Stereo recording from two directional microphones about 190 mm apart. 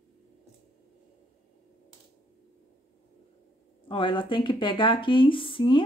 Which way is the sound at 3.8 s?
25° left (ahead or behind).